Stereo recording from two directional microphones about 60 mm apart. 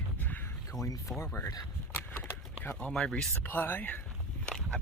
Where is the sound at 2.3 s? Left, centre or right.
Left.